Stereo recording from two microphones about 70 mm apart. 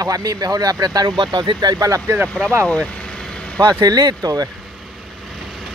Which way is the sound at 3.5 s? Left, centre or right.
Right.